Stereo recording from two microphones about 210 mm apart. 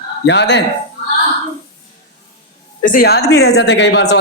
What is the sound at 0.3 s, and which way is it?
Speech, 55° left (ahead or behind).